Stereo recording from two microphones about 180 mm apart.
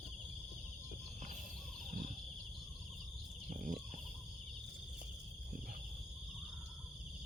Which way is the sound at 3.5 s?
50° right (ahead or behind).